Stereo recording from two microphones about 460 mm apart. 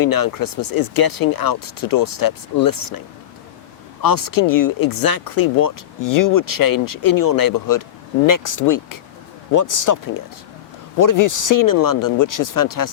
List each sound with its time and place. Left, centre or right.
0.0 s speech: left
4.0 s speech: left